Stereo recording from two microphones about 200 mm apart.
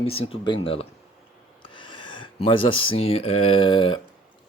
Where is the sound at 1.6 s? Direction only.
25° left (ahead or behind).